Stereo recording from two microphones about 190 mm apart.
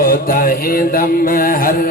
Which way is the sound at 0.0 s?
50° left (ahead or behind).